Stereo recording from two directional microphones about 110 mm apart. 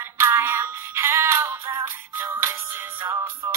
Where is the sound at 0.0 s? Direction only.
20° right (ahead or behind).